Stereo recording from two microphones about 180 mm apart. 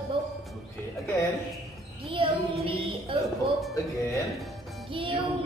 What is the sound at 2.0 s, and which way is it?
Child singing, 30° right (ahead or behind).